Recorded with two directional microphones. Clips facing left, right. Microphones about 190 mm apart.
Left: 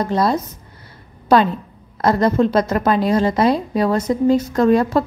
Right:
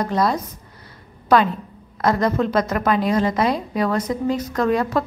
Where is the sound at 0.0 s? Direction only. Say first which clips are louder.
Left 2 dB; 30° left (ahead or behind).